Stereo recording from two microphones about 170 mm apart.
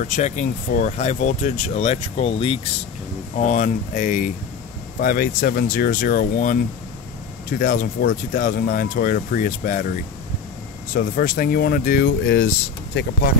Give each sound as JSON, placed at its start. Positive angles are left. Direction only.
{"t": 0.0, "sound": "speech", "side_deg": 45}
{"t": 3.4, "sound": "speech", "side_deg": 45}
{"t": 10.9, "sound": "speech", "side_deg": 65}